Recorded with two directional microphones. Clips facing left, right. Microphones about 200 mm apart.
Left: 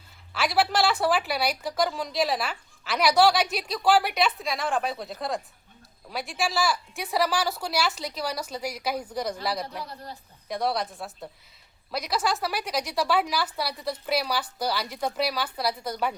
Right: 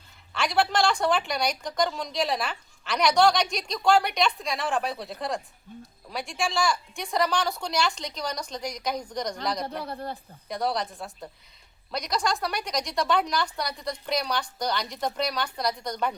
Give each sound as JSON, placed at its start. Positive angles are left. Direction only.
{"t": 0.3, "sound": "a woman's voice", "side_deg": 5}
{"t": 9.8, "sound": "a woman's voice", "side_deg": -55}
{"t": 10.5, "sound": "a woman's voice", "side_deg": 0}